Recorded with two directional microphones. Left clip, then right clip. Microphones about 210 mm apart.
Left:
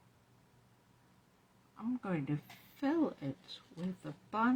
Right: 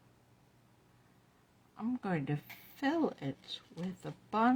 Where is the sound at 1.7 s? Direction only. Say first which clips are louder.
Right 2 dB; 55° right (ahead or behind).